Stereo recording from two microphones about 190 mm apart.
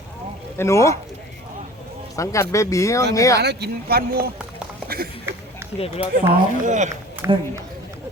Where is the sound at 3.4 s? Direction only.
60° right (ahead or behind).